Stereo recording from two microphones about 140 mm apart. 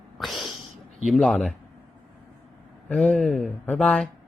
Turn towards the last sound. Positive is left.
turn(degrees=5)  # may be behind; listen again after turning